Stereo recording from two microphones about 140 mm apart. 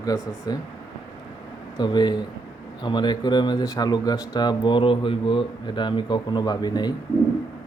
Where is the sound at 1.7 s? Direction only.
30° left (ahead or behind).